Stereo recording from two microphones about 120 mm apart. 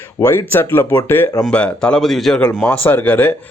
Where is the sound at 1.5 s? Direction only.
10° left (ahead or behind).